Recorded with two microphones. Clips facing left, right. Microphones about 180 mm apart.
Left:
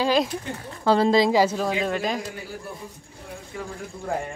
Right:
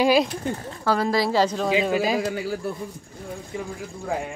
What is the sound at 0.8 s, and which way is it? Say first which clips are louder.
Speech: left 4 dB; 25° left (ahead or behind).